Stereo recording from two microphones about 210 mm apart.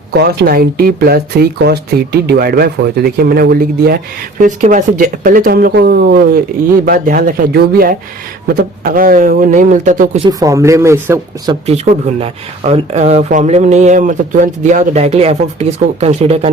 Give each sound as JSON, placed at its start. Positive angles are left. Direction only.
{"t": 0.1, "sound": "speech", "side_deg": -50}
{"t": 10.2, "sound": "speech", "side_deg": -15}
{"t": 11.6, "sound": "speech", "side_deg": -30}